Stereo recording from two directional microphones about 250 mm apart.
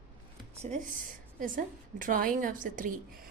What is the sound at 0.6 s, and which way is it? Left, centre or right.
A woman's voice, right.